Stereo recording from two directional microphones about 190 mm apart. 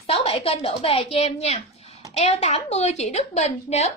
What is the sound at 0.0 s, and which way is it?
A woman's voice, 30° left (ahead or behind).